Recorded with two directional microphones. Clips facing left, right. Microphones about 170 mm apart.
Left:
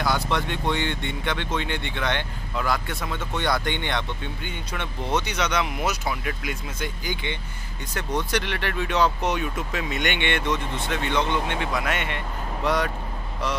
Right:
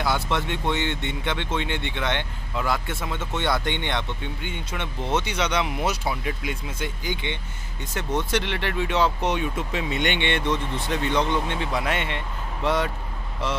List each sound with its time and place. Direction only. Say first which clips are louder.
0.0 s speech: even; 25° right (ahead or behind)